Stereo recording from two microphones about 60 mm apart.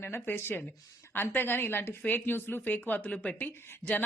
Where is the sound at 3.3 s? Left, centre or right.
Left.